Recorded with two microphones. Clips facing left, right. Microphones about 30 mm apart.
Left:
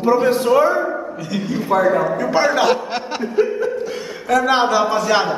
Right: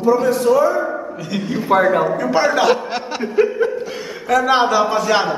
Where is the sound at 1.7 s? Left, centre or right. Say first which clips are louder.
Right 2 dB; right.